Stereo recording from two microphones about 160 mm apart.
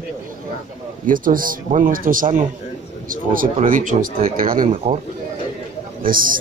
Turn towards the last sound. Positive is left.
turn(degrees=-60)  # may be behind; listen again after turning